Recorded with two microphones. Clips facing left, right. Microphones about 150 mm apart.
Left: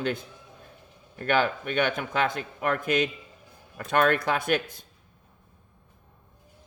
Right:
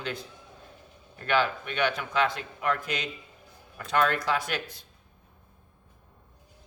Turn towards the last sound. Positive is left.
turn(degrees=50)  # may be behind; listen again after turning